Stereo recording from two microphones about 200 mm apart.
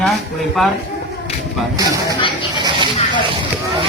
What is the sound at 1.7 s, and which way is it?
Speech, 15° right (ahead or behind).